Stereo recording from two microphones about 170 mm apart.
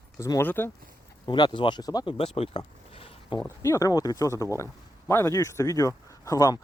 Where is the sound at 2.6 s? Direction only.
35° left (ahead or behind).